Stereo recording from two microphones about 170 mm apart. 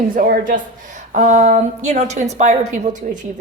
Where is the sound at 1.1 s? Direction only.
45° right (ahead or behind).